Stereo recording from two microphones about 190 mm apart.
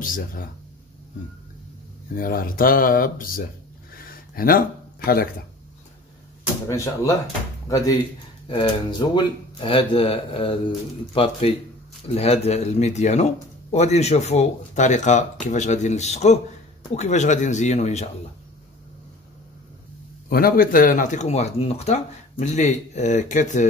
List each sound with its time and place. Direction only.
0.0 s speech: 45° left (ahead or behind)
2.1 s speech: 50° left (ahead or behind)
3.9 s a sound: 50° left (ahead or behind)
6.7 s speech: 15° left (ahead or behind); by 18.1 s 35° left (ahead or behind)
20.2 s speech: 50° left (ahead or behind)